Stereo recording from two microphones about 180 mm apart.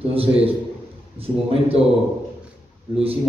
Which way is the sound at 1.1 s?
30° right (ahead or behind).